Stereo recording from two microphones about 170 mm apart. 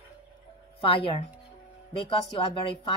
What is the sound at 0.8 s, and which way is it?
A woman's voice, 35° left (ahead or behind).